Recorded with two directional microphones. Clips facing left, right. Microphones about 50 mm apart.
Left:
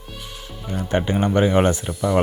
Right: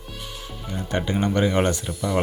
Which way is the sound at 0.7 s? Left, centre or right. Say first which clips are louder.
Left 4 dB; left.